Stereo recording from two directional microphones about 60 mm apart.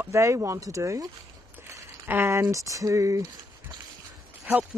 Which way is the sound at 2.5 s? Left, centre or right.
Right.